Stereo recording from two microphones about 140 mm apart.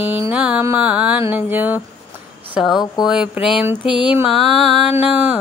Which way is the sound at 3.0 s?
5° right (ahead or behind).